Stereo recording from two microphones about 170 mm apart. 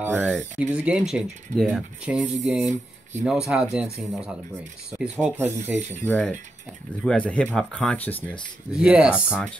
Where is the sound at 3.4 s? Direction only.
Centre (ahead or behind).